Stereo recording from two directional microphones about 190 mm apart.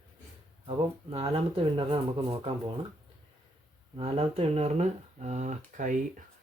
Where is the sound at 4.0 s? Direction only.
30° right (ahead or behind).